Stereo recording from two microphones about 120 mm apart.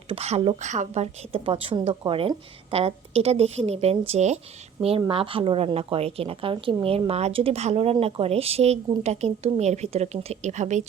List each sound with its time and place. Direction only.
0.1 s a woman's voice: 60° right (ahead or behind)
4.9 s a woman's voice: 45° right (ahead or behind); by 10.8 s 85° right